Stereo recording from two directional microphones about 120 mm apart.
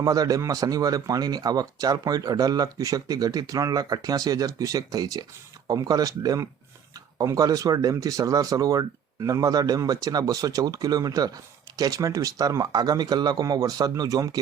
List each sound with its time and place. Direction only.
0.0 s speech: 30° right (ahead or behind)